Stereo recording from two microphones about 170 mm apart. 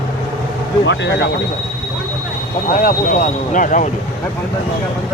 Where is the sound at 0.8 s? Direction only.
90° left.